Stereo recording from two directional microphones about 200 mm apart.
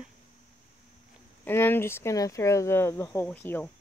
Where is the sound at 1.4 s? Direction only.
10° left (ahead or behind).